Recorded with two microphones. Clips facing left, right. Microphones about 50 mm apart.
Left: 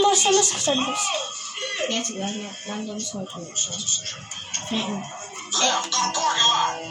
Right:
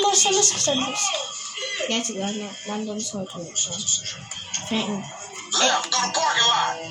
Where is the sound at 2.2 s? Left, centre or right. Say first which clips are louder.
Right 1 dB; centre.